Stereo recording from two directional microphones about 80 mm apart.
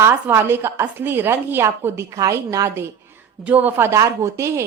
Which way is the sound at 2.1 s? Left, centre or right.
Right.